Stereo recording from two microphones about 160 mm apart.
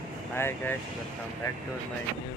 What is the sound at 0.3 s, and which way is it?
Speech, 15° left (ahead or behind).